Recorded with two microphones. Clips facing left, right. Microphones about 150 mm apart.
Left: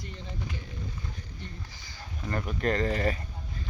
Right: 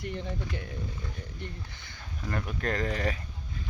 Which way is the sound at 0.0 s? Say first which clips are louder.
Right 5 dB; 60° right (ahead or behind).